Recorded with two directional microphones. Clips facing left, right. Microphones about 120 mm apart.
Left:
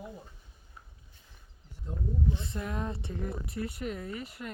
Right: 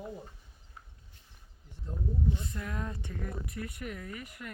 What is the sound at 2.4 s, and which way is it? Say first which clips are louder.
Speech: left 3 dB; 25° left (ahead or behind).